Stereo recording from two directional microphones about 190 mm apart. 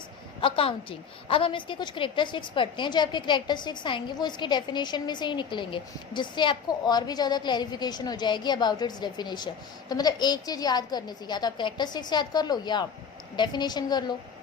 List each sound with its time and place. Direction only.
0.4 s a woman's voice: 30° left (ahead or behind)